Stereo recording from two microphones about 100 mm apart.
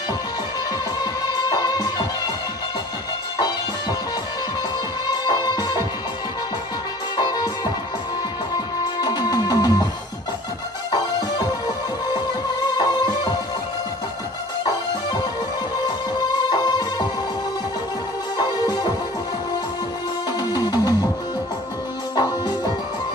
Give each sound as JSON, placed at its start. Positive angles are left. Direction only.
{"t": 1.3, "sound": "music", "side_deg": 45}
{"t": 5.0, "sound": "music", "side_deg": 45}
{"t": 7.2, "sound": "music", "side_deg": 45}
{"t": 9.0, "sound": "music", "side_deg": 40}
{"t": 10.9, "sound": "music", "side_deg": 40}
{"t": 12.7, "sound": "music", "side_deg": 45}
{"t": 16.4, "sound": "music", "side_deg": 45}
{"t": 18.4, "sound": "music", "side_deg": 45}
{"t": 20.3, "sound": "music", "side_deg": 40}